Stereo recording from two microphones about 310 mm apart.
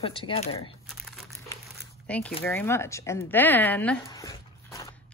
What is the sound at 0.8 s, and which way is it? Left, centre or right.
Crumpling, centre.